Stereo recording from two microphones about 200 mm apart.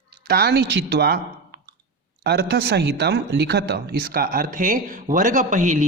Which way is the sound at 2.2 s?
55° right (ahead or behind).